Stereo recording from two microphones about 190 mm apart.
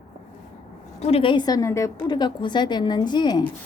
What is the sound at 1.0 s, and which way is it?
A woman's voice, 30° left (ahead or behind).